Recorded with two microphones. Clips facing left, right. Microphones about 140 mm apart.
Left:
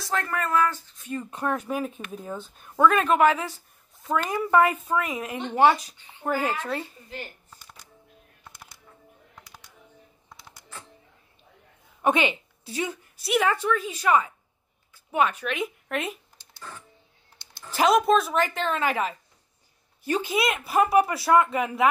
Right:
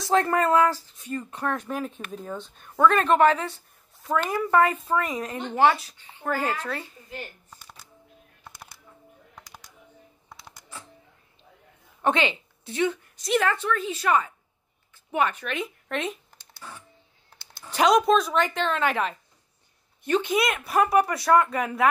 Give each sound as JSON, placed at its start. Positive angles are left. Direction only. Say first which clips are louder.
{"t": 0.0, "sound": "speech", "louder": "right 7 dB", "side_deg": -30}
{"t": 0.7, "sound": "speech", "louder": "right 4 dB", "side_deg": -35}
{"t": 0.9, "sound": "a sound", "louder": "even", "side_deg": 5}
{"t": 1.3, "sound": "a woman's voice", "louder": "left 2 dB", "side_deg": 10}
{"t": 4.5, "sound": "a woman's voice", "louder": "left 1 dB", "side_deg": 15}
{"t": 12.0, "sound": "a woman's voice", "louder": "left 1 dB", "side_deg": 15}
{"t": 17.6, "sound": "speech", "louder": "right 1 dB", "side_deg": 0}